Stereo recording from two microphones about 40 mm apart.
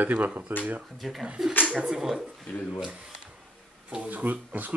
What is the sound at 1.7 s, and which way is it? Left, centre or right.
Speech, centre.